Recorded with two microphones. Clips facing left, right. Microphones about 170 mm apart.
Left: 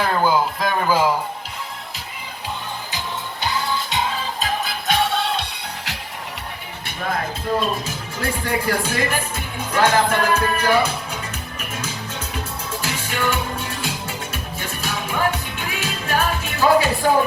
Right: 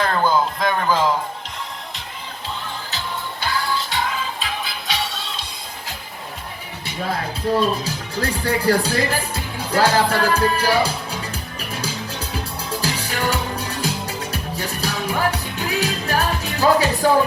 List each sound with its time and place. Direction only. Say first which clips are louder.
0.0 s a sound: even; 10° left (ahead or behind)
3.4 s music: even; 20° left (ahead or behind)
4.1 s music: left 2 dB; 40° left (ahead or behind); by 6.0 s 70° left (ahead or behind)
7.9 s music: right 2 dB; 40° right (ahead or behind)
12.8 s music: even; 35° right (ahead or behind)